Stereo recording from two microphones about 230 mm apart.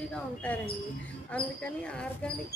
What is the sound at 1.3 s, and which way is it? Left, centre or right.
Speech, centre.